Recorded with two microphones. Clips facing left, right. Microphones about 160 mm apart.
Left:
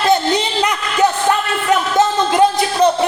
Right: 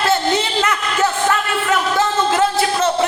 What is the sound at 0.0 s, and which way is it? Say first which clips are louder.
Music: left 2 dB; 15° left (ahead or behind).